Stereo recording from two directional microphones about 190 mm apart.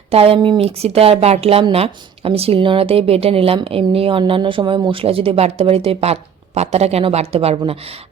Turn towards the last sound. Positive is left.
turn(degrees=-30)  # may be behind; listen again after turning